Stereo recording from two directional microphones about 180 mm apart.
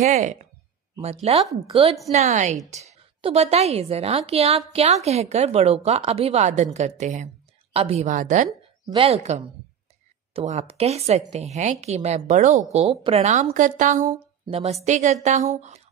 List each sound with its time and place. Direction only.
0.0 s a woman's voice: 40° right (ahead or behind)
14.4 s a woman's voice: 35° right (ahead or behind)